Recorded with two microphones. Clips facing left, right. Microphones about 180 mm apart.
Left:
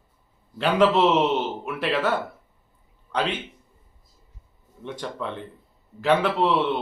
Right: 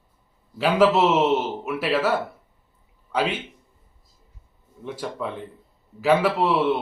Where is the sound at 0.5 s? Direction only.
5° right (ahead or behind).